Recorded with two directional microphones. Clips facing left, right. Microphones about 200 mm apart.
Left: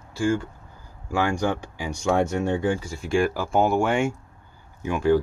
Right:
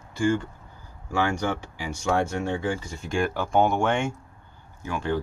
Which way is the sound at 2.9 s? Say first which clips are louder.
Left 4 dB; 5° left (ahead or behind).